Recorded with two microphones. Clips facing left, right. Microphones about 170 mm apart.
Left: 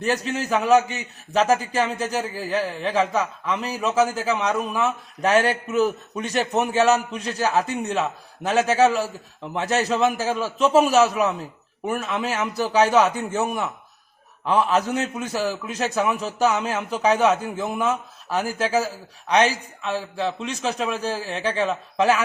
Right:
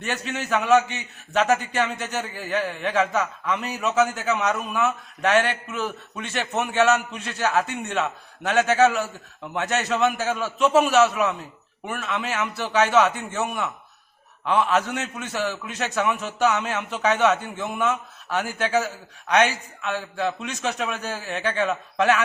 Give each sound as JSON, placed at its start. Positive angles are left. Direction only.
{"t": 0.0, "sound": "a man's voice", "side_deg": 35}